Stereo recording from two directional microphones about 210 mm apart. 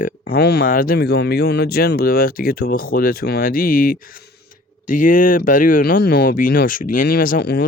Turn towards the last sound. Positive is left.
turn(degrees=50)  # may be behind; listen again after turning